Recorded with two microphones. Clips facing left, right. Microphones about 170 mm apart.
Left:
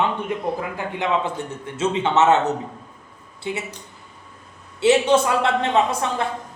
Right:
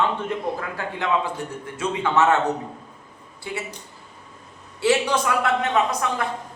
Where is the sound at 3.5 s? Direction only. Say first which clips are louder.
Left 4 dB; 20° left (ahead or behind).